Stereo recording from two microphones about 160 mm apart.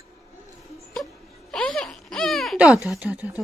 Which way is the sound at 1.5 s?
5° left (ahead or behind).